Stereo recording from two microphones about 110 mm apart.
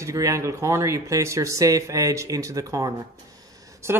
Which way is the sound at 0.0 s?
30° right (ahead or behind).